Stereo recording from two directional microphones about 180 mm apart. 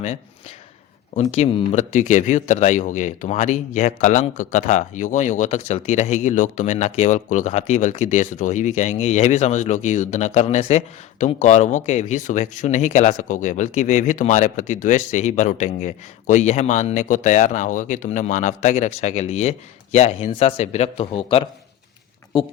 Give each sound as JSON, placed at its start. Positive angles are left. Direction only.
{"t": 1.1, "sound": "speech", "side_deg": 40}